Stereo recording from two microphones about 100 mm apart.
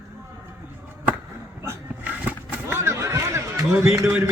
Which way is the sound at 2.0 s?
15° right (ahead or behind).